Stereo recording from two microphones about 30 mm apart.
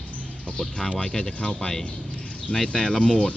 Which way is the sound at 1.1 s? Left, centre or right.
Left.